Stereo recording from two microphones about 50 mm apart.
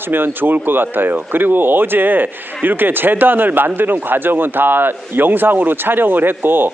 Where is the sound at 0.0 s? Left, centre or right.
Right.